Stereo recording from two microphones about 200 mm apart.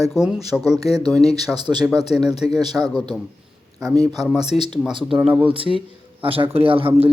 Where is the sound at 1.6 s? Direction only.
20° right (ahead or behind).